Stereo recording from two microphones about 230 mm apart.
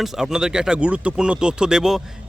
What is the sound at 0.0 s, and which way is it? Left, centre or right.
Speech, centre.